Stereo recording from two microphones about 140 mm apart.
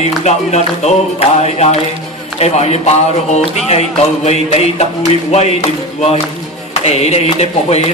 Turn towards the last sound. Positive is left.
turn(degrees=50)  # may be behind; listen again after turning